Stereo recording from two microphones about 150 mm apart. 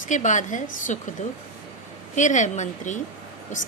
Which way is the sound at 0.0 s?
55° left (ahead or behind).